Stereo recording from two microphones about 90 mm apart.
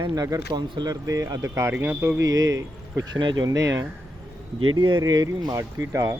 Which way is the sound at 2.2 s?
40° right (ahead or behind).